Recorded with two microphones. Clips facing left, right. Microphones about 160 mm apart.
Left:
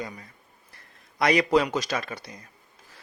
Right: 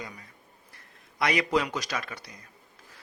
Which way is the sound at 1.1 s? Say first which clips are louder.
Left 5 dB; 35° left (ahead or behind).